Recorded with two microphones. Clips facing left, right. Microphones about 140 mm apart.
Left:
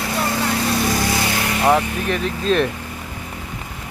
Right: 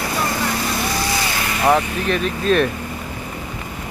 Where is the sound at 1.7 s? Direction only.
20° left (ahead or behind).